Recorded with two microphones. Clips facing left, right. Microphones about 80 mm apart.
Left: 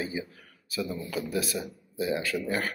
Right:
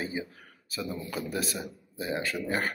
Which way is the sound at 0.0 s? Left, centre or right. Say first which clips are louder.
Left 1 dB; right.